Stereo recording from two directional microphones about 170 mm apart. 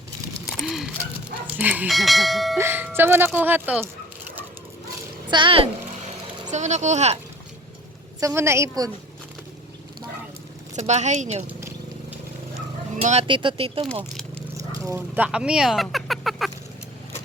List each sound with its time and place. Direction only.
0.6 s a sound: centre (ahead or behind)
1.5 s speech: 10° right (ahead or behind)
2.6 s speech: 10° right (ahead or behind)
5.3 s a child's voice: 30° right (ahead or behind)
6.5 s a woman's voice: 45° right (ahead or behind)
8.2 s speech: 15° right (ahead or behind)
10.8 s a woman's voice: 45° right (ahead or behind)
13.0 s speech: 40° right (ahead or behind)
14.7 s speech: 15° right (ahead or behind); by 16.5 s centre (ahead or behind)